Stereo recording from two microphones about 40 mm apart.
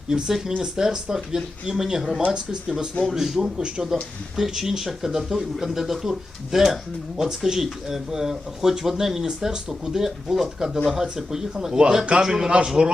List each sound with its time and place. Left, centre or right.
0.1 s speech: centre
2.3 s speech: centre
3.1 s speech: centre